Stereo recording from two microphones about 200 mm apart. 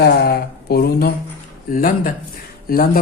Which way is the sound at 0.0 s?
55° left (ahead or behind).